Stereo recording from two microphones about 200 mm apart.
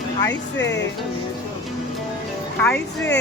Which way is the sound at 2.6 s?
5° left (ahead or behind).